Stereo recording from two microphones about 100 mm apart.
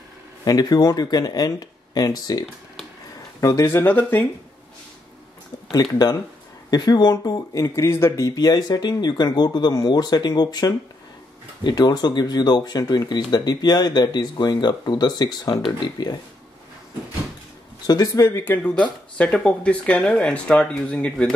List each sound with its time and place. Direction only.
0.5 s speech: 40° left (ahead or behind); by 4.3 s 20° left (ahead or behind)
5.7 s speech: 40° left (ahead or behind)
8.4 s speech: 40° left (ahead or behind)
17.8 s speech: 35° left (ahead or behind); by 21.3 s 10° left (ahead or behind)